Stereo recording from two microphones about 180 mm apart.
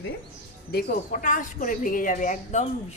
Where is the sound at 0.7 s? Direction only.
45° left (ahead or behind).